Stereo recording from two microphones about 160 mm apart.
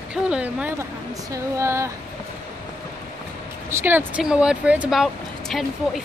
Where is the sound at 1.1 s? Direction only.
20° right (ahead or behind).